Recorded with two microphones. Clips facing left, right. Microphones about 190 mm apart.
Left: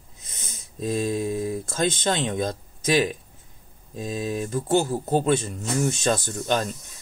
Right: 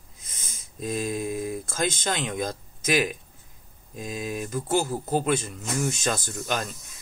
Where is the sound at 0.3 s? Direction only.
30° left (ahead or behind).